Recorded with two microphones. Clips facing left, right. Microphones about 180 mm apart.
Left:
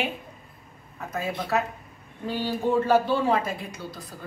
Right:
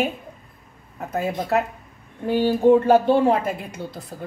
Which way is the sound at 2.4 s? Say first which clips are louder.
Right 8 dB; 55° right (ahead or behind).